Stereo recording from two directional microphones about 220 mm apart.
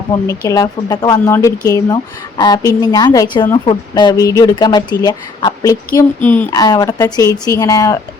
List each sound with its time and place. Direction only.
0.3 s a woman's voice: 15° left (ahead or behind)